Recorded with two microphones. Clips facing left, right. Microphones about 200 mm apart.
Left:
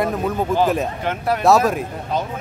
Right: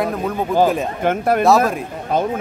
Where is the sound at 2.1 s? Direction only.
50° right (ahead or behind).